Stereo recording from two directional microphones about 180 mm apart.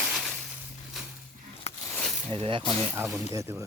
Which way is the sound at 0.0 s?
Centre (ahead or behind).